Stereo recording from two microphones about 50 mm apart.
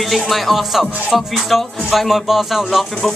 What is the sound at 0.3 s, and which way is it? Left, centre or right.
Music, centre.